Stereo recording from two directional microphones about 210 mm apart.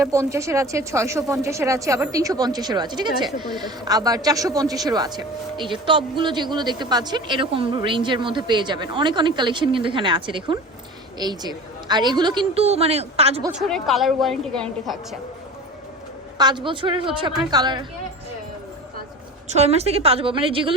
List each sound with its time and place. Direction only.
0.0 s a woman's voice: 15° right (ahead or behind)
13.5 s a woman's voice: centre (ahead or behind)
16.4 s a woman's voice: 20° right (ahead or behind)
19.5 s a woman's voice: 30° right (ahead or behind)